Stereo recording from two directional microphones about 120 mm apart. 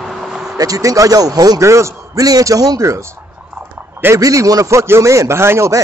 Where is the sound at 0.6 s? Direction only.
30° right (ahead or behind).